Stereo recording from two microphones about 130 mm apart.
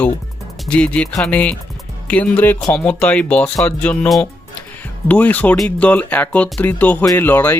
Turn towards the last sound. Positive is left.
turn(degrees=15)  # may be behind; listen again after turning